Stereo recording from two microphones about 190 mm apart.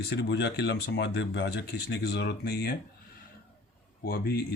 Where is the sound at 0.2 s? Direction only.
65° left (ahead or behind).